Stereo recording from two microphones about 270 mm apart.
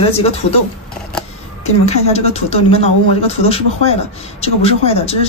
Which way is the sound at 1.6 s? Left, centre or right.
Left.